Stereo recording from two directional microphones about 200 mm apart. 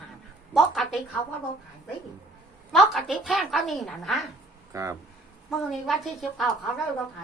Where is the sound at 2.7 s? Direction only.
Centre (ahead or behind).